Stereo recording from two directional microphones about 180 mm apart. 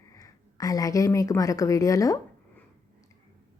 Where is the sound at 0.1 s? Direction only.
20° left (ahead or behind).